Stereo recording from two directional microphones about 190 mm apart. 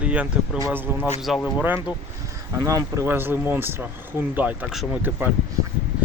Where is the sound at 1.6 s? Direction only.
10° right (ahead or behind).